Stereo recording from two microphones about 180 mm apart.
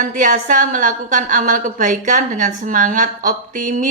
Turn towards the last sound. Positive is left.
turn(degrees=-45)  # may be behind; listen again after turning